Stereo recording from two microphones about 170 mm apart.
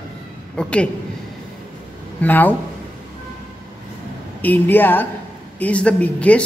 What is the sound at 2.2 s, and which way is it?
Speech, 10° left (ahead or behind).